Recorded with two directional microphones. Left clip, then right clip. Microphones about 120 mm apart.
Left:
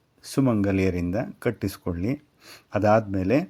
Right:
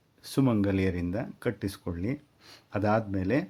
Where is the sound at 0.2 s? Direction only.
15° left (ahead or behind).